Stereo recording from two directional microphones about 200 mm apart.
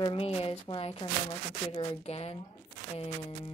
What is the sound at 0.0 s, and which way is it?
Speech, 25° left (ahead or behind).